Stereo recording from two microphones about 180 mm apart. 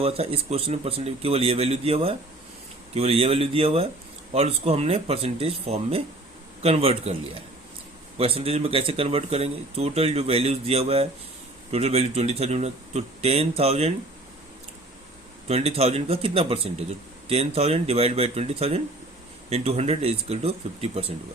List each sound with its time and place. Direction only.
0.0 s speech: 30° right (ahead or behind)
8.2 s speech: 30° right (ahead or behind)
15.4 s speech: 35° right (ahead or behind)